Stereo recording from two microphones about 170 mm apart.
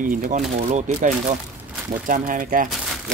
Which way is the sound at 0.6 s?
40° right (ahead or behind).